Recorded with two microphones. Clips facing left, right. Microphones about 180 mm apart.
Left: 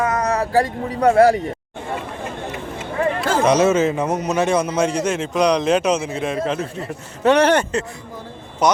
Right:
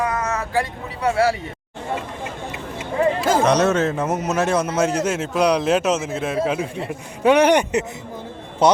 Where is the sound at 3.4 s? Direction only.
Centre (ahead or behind); by 7.8 s 15° right (ahead or behind).